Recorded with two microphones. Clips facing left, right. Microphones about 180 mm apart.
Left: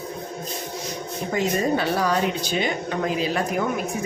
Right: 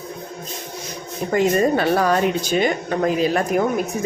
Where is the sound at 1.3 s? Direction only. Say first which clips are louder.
Right 5 dB; 55° right (ahead or behind).